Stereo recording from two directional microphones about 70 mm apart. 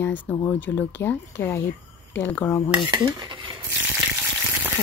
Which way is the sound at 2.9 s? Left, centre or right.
Right.